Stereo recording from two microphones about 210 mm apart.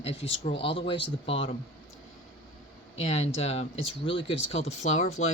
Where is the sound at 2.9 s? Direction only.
30° left (ahead or behind).